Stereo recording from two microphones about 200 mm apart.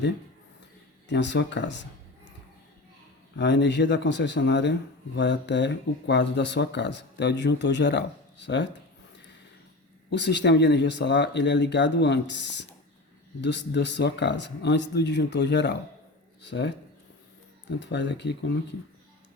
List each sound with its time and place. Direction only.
1.0 s speech: 60° left (ahead or behind)
3.3 s speech: 60° left (ahead or behind)
10.1 s speech: 60° left (ahead or behind)